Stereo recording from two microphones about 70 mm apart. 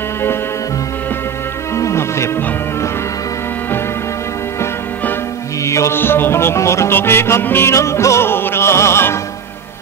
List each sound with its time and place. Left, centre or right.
1.8 s music: left
5.6 s music: left
5.9 s music: left